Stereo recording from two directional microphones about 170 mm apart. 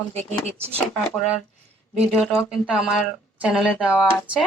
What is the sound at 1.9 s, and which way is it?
Speech, centre (ahead or behind).